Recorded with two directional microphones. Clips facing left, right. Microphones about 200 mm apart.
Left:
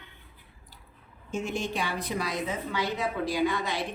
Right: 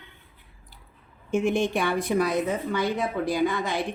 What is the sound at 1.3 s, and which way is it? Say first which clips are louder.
A woman's voice: right 8 dB; 55° right (ahead or behind).